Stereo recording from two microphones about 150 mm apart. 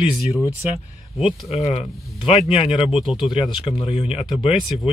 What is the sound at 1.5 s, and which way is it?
Speech, 45° left (ahead or behind).